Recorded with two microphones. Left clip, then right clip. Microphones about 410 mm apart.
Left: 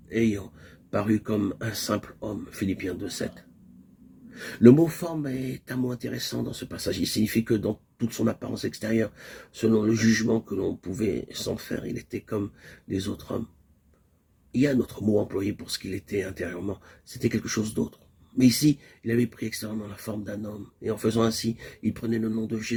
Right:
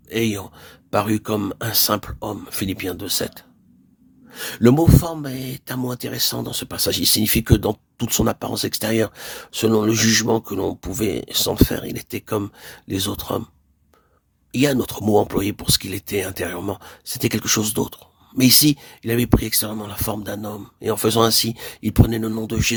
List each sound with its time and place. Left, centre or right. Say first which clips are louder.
0.1 s speech: right 4 dB; right
14.5 s speech: right 5 dB; right